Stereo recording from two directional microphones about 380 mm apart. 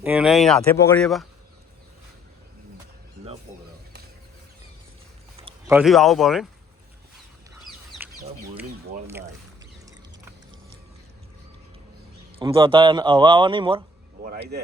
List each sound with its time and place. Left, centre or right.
0.0 s speech: centre
5.4 s speech: centre
7.6 s chicken: centre
12.4 s a man's voice: centre
14.3 s speech: right